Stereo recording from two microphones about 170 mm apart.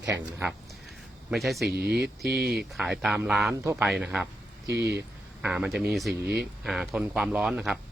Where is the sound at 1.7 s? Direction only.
70° right (ahead or behind).